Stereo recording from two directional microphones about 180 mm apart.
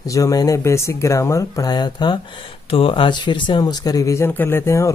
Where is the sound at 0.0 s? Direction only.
20° left (ahead or behind).